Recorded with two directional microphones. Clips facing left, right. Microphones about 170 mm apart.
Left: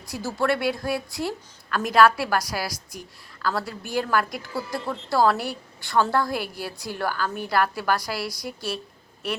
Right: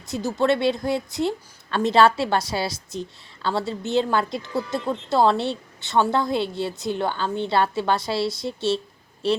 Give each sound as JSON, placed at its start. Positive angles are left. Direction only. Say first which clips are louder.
{"t": 0.1, "sound": "a woman's voice", "louder": "right 3 dB", "side_deg": -20}